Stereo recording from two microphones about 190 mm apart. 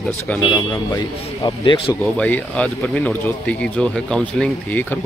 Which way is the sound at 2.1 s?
5° left (ahead or behind).